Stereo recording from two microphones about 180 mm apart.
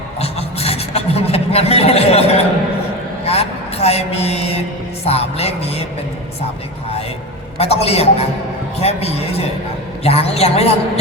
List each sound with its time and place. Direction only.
0.2 s a sound: 35° left (ahead or behind)
3.2 s a man's voice: 35° left (ahead or behind)
5.0 s music: 35° left (ahead or behind)
7.6 s music: 35° left (ahead or behind)